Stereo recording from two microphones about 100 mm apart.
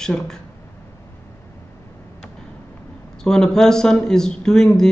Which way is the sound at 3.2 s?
5° left (ahead or behind).